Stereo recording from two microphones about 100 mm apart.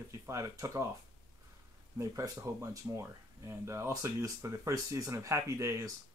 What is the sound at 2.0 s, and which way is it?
Speech, 30° right (ahead or behind).